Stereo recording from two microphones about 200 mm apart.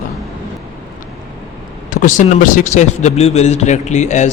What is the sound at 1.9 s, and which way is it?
A man's voice, 40° left (ahead or behind).